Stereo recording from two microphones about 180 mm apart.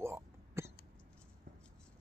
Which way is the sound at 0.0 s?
15° right (ahead or behind).